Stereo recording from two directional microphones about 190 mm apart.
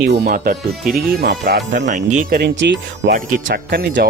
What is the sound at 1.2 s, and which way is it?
Speech, 60° right (ahead or behind).